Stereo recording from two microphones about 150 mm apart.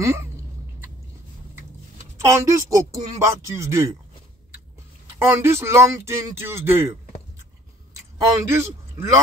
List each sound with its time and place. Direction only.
0.0 s speech: 20° right (ahead or behind)
2.2 s speech: 20° right (ahead or behind)
5.3 s speech: 15° right (ahead or behind)